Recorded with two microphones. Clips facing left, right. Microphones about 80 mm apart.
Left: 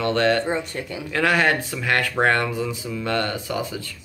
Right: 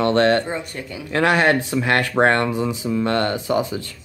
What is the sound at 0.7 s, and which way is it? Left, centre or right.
Speech, centre.